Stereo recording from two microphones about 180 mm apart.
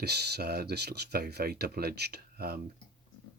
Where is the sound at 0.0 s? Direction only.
65° right (ahead or behind).